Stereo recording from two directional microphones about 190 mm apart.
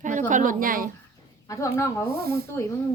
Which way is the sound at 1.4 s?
15° left (ahead or behind).